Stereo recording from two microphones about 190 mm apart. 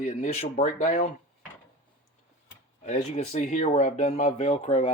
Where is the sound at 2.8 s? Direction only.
35° left (ahead or behind).